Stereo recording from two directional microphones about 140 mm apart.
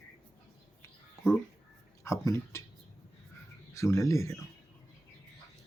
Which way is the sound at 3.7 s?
20° left (ahead or behind).